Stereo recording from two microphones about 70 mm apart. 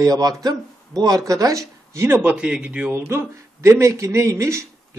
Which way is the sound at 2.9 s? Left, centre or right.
Right.